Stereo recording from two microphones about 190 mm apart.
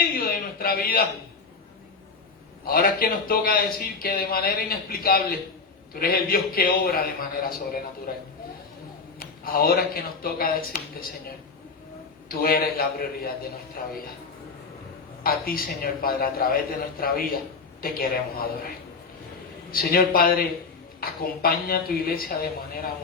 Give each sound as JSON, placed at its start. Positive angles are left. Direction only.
{"t": 0.0, "sound": "a sound", "side_deg": 50}
{"t": 2.6, "sound": "a man's voice", "side_deg": 50}
{"t": 12.3, "sound": "a man's voice", "side_deg": 50}
{"t": 15.2, "sound": "a man's voice", "side_deg": 50}
{"t": 19.7, "sound": "a man's voice", "side_deg": 50}